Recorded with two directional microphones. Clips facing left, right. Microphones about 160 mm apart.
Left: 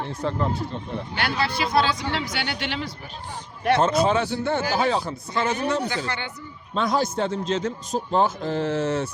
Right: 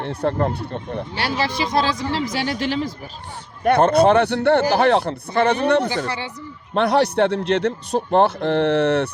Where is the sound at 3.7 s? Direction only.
60° right (ahead or behind).